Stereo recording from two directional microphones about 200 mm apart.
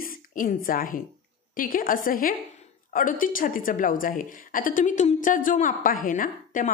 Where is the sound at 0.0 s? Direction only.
45° left (ahead or behind).